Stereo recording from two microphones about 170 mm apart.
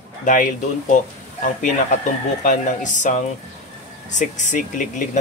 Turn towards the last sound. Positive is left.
turn(degrees=50)  # may be behind; listen again after turning